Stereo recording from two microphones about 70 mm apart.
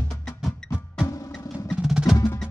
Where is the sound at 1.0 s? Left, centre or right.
Left.